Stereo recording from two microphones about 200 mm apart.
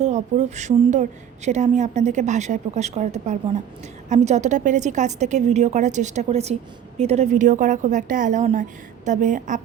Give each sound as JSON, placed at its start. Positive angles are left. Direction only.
{"t": 0.0, "sound": "a woman's voice", "side_deg": -35}